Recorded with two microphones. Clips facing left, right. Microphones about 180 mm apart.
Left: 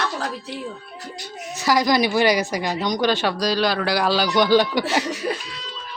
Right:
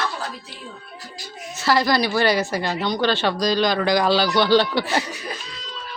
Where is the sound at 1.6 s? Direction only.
15° left (ahead or behind).